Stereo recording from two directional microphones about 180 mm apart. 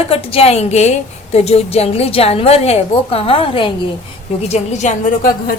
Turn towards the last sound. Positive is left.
turn(degrees=45)  # may be behind; listen again after turning